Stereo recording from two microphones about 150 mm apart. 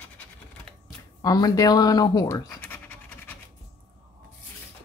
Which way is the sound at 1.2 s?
25° left (ahead or behind).